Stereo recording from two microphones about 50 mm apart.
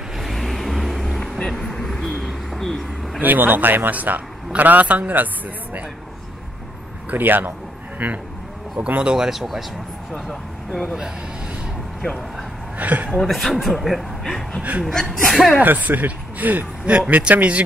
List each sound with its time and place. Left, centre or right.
0.2 s vehicle: centre
2.2 s a sound: centre
3.2 s a man's voice: right
7.1 s a man's voice: right
8.0 s a man's voice: right
9.0 s speech: centre
12.7 s a woman's voice: right
13.2 s speech: centre
14.6 s speech: right
14.9 s speech: centre
15.6 s a man's voice: right
16.9 s speech: right